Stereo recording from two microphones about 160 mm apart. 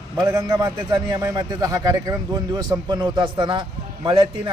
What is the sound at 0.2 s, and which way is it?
A man's voice, 20° right (ahead or behind).